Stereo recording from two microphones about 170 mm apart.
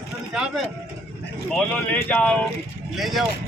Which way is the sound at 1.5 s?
10° left (ahead or behind).